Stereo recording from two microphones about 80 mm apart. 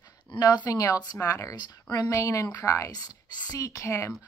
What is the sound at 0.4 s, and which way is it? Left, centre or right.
A woman's voice, left.